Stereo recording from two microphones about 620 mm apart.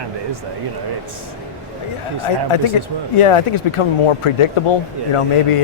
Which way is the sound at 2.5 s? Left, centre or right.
Left.